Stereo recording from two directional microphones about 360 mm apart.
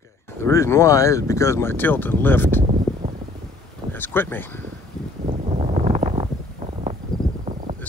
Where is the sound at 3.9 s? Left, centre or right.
Centre.